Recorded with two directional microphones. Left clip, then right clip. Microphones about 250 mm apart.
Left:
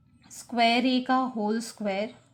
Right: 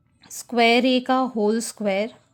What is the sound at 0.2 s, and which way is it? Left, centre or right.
Speech, right.